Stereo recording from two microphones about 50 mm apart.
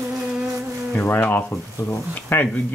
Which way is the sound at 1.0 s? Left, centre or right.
Left.